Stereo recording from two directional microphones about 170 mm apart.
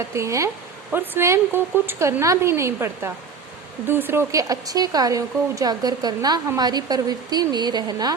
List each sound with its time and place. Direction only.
0.1 s speech: 15° right (ahead or behind)